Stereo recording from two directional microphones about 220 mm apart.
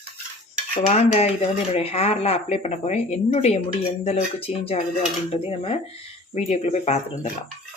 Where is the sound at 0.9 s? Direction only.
30° left (ahead or behind).